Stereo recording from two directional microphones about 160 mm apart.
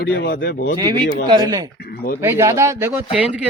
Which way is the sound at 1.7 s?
85° left.